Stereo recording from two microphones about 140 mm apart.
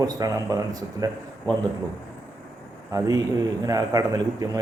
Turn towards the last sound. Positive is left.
turn(degrees=-25)  # may be behind; listen again after turning